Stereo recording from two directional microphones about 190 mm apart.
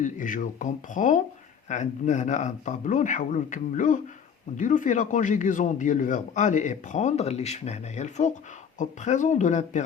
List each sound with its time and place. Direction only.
0.0 s speech: 45° left (ahead or behind)